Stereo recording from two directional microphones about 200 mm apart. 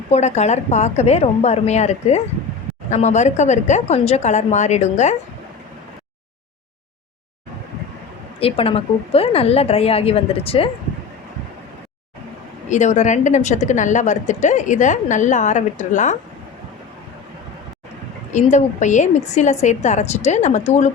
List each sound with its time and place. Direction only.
0.1 s a woman's voice: 35° left (ahead or behind)
8.4 s a woman's voice: 30° left (ahead or behind)
12.6 s a woman's voice: 35° left (ahead or behind)
18.3 s a woman's voice: 35° left (ahead or behind)